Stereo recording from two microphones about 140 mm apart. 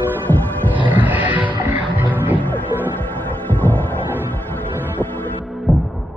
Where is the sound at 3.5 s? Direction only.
15° left (ahead or behind).